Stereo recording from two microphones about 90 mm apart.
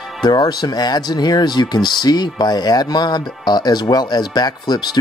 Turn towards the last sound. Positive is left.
turn(degrees=50)  # may be behind; listen again after turning